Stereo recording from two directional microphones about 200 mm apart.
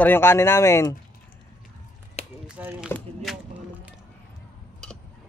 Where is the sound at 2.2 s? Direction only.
30° left (ahead or behind).